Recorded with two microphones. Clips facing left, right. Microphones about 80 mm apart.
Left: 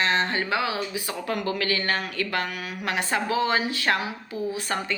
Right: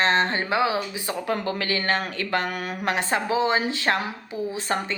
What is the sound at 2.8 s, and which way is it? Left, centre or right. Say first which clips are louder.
A woman's voice: right 1 dB; right.